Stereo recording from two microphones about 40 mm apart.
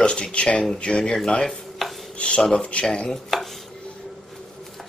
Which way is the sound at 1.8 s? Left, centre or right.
Centre.